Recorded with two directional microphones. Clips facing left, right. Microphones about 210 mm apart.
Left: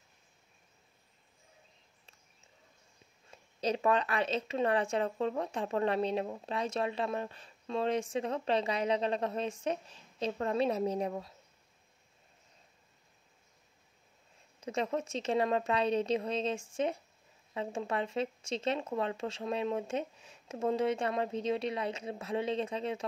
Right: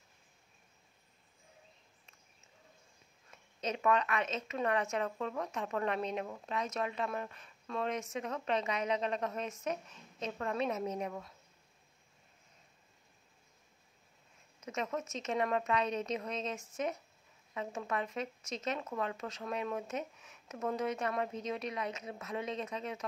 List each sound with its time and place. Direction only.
3.3 s a woman's voice: 30° left (ahead or behind)
14.6 s a woman's voice: 30° left (ahead or behind)